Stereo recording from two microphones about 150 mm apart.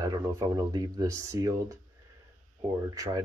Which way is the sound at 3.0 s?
25° right (ahead or behind).